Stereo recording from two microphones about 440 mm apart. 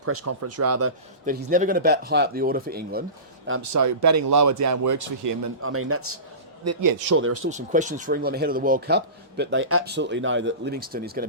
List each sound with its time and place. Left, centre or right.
0.0 s speech: right
1.2 s a man's voice: centre
3.6 s speech: right
5.6 s a man's voice: right
6.7 s speech: right
7.2 s a man's voice: right
7.5 s a man's voice: centre